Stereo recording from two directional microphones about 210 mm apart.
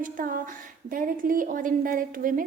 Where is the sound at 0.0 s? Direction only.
40° right (ahead or behind).